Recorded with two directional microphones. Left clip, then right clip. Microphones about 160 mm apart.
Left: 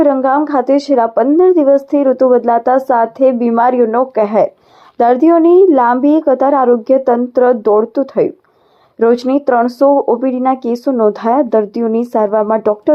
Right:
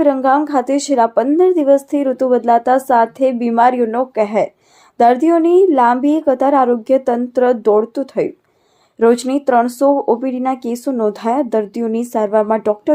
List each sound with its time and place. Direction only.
0.0 s a woman's voice: 15° right (ahead or behind)